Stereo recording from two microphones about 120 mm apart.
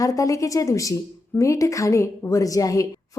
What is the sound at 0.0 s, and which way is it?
A woman's voice, 30° left (ahead or behind).